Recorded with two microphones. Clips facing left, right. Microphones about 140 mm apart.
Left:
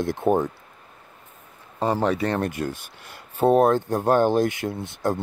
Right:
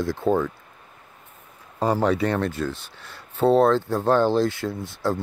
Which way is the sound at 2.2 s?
35° left (ahead or behind).